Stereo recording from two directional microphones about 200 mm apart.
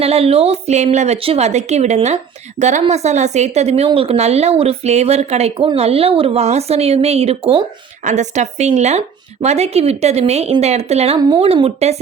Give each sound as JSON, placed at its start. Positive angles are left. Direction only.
{"t": 0.0, "sound": "a woman's voice", "side_deg": -30}